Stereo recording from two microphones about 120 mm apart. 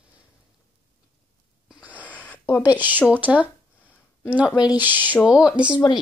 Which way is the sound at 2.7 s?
15° right (ahead or behind).